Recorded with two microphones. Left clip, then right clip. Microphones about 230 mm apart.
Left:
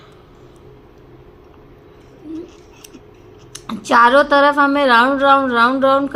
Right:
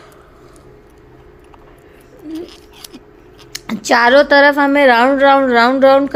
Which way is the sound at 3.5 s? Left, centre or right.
Right.